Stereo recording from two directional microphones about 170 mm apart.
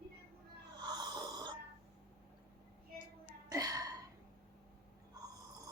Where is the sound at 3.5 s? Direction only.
20° right (ahead or behind).